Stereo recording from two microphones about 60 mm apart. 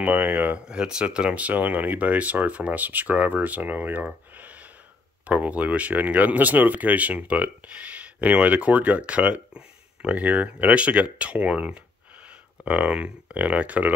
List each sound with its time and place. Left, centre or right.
0.0 s speech: right
0.7 s speech: centre; by 4.0 s right
4.4 s gasp: right
5.2 s speech: right